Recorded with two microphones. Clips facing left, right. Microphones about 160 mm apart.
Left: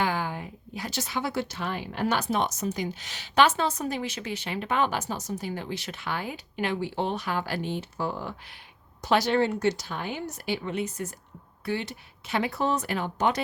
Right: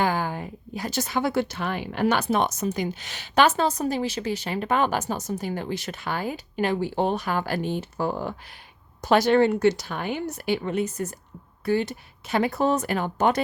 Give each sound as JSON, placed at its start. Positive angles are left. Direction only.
{"t": 0.0, "sound": "speech", "side_deg": -45}